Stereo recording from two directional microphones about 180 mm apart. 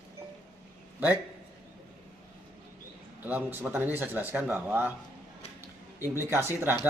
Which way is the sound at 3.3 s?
10° right (ahead or behind).